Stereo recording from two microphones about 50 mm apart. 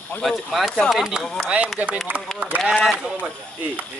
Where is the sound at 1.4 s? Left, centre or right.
Right.